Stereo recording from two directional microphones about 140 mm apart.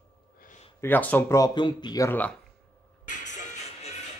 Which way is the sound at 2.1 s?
10° left (ahead or behind).